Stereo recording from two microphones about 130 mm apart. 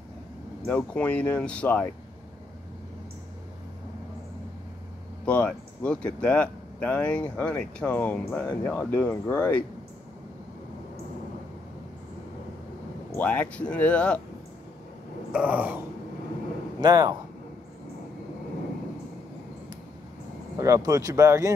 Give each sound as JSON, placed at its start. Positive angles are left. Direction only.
{"t": 0.7, "sound": "speech", "side_deg": 10}
{"t": 5.2, "sound": "speech", "side_deg": 10}
{"t": 13.1, "sound": "speech", "side_deg": 15}
{"t": 15.3, "sound": "a sound", "side_deg": -10}
{"t": 16.8, "sound": "speech", "side_deg": -35}
{"t": 20.5, "sound": "speech", "side_deg": -25}